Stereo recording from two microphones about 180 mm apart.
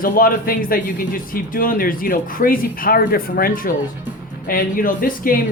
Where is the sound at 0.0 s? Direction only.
55° left (ahead or behind).